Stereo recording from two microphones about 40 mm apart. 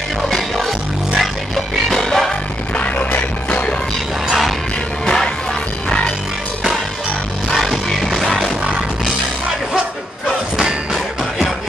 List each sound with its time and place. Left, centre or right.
0.3 s music: centre
3.2 s music: left
5.1 s music: centre
7.5 s music: centre